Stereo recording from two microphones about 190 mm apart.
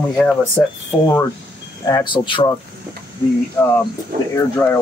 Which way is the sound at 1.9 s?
25° left (ahead or behind).